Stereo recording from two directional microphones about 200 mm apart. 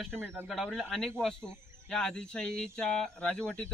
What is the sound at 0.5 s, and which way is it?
Speech, centre (ahead or behind).